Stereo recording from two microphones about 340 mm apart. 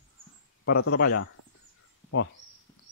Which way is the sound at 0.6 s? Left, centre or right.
Left.